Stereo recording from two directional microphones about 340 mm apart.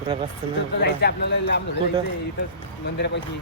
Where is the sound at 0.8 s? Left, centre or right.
Left.